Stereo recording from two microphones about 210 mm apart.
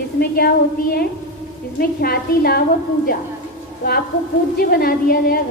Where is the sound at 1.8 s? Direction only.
45° left (ahead or behind).